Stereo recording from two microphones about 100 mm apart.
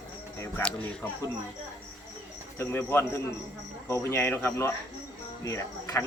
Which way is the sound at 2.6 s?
20° left (ahead or behind).